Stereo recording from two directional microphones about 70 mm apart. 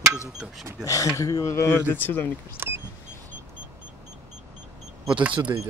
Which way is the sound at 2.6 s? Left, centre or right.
Right.